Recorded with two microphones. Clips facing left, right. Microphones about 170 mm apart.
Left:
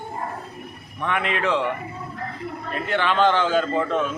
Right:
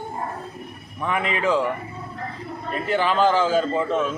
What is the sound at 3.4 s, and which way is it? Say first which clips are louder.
Speech: right 1 dB; 35° right (ahead or behind).